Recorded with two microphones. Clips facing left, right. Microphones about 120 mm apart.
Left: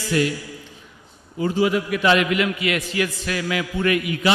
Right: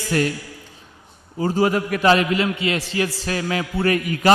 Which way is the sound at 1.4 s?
40° right (ahead or behind).